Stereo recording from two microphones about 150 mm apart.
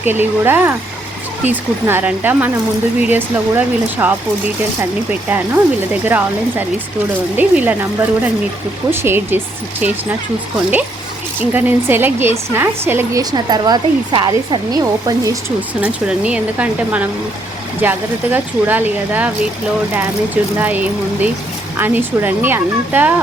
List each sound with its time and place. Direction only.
0.0 s speech: 15° right (ahead or behind)
5.3 s speech: 10° right (ahead or behind)
11.3 s speech: 15° right (ahead or behind)
13.3 s speech: 30° right (ahead or behind)
15.8 s speech: 10° right (ahead or behind)
20.6 s speech: 10° right (ahead or behind)